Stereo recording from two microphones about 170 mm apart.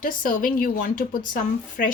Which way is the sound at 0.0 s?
55° left (ahead or behind).